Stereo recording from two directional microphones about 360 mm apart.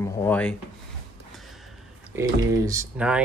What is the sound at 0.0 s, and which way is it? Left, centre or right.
Speech, centre.